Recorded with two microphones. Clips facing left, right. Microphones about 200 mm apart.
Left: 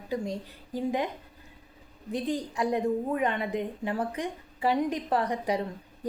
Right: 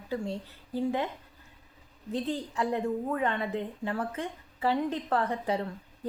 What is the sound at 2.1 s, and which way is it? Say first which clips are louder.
A woman's voice: left 2 dB; 15° left (ahead or behind).